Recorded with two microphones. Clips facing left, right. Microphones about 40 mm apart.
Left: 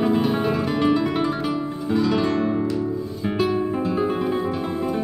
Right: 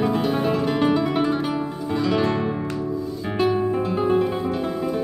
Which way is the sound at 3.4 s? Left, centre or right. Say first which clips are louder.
Right 2 dB; centre.